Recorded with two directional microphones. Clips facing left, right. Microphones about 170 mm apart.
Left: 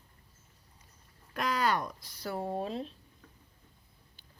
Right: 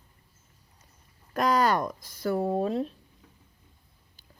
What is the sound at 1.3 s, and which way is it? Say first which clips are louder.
Speech: right 7 dB; 40° right (ahead or behind).